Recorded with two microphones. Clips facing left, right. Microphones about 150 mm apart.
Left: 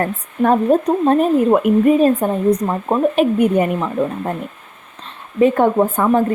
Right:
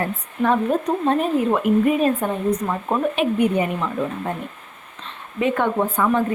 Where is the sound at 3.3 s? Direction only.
45° left (ahead or behind).